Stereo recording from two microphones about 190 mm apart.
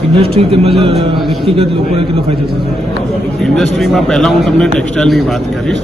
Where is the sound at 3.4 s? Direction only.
Centre (ahead or behind).